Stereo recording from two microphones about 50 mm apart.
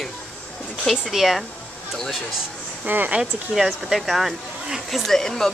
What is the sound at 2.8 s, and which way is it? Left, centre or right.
Speech, right.